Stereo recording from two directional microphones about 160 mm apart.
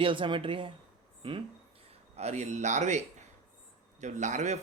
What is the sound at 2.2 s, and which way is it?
Speech, 45° right (ahead or behind).